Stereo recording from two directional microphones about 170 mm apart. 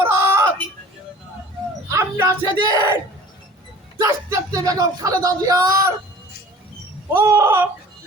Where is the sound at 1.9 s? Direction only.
15° right (ahead or behind).